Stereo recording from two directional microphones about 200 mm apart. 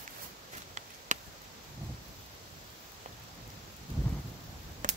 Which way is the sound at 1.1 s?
40° right (ahead or behind).